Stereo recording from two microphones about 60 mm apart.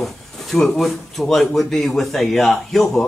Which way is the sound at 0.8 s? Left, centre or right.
Centre.